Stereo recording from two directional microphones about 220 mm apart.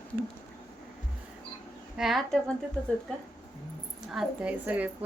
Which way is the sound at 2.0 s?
Centre (ahead or behind).